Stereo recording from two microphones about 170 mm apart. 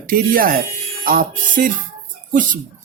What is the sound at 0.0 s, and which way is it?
A woman's voice, 55° right (ahead or behind).